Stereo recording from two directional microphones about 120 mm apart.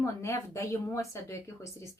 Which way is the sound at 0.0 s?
25° left (ahead or behind).